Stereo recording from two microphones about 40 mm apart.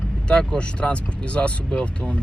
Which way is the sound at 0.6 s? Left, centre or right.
Left.